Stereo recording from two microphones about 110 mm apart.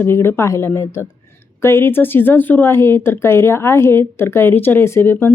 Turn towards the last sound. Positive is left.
turn(degrees=20)  # may be behind; listen again after turning